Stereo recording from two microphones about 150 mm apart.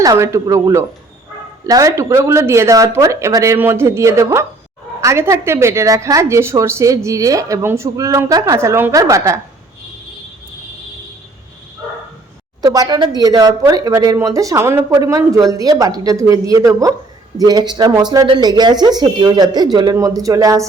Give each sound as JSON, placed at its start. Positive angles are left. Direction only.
{"t": 0.0, "sound": "a woman's voice", "side_deg": -20}
{"t": 12.6, "sound": "a woman's voice", "side_deg": -25}